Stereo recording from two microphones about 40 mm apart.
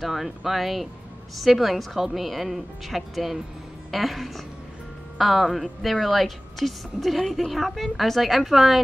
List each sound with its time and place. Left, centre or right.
0.0 s a woman's voice: centre